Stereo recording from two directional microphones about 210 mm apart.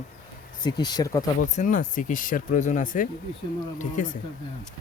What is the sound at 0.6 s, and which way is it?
Speech, 20° left (ahead or behind).